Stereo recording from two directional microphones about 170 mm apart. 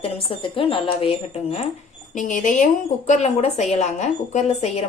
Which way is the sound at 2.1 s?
50° left (ahead or behind).